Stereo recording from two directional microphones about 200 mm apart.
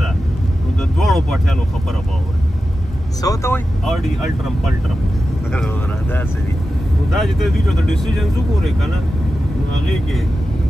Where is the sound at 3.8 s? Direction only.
Centre (ahead or behind).